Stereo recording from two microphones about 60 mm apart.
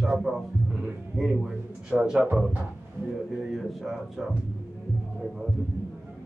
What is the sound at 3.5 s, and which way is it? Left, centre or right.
Speech, centre.